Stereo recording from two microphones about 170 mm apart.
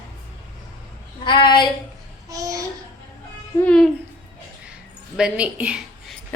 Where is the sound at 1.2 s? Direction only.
30° left (ahead or behind).